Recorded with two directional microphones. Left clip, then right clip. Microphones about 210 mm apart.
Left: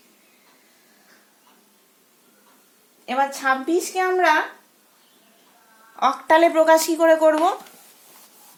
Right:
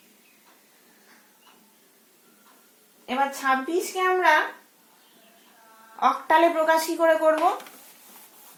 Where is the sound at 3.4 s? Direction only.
50° left (ahead or behind).